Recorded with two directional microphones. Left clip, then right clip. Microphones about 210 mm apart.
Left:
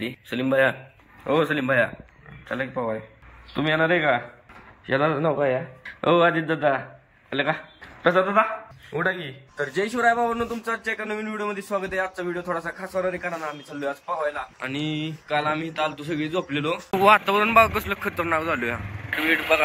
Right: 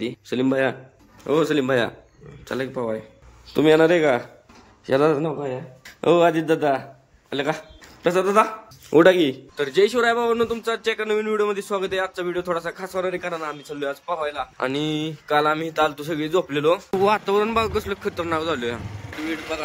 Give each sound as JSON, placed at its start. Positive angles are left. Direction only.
{"t": 0.0, "sound": "a man's voice", "side_deg": -15}
{"t": 5.2, "sound": "speech", "side_deg": -10}
{"t": 9.6, "sound": "speech", "side_deg": -5}
{"t": 14.6, "sound": "speech", "side_deg": -20}